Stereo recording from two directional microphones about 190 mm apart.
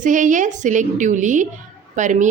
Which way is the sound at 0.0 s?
40° right (ahead or behind).